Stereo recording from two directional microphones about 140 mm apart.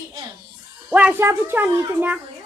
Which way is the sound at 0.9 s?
10° right (ahead or behind).